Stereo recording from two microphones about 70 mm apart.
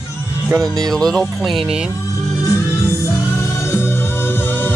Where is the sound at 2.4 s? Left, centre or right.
Left.